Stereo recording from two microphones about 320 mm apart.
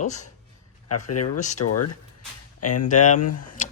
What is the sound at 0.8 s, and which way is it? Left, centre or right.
Speech, left.